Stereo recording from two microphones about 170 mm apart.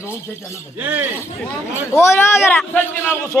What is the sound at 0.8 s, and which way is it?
Speech, 10° right (ahead or behind).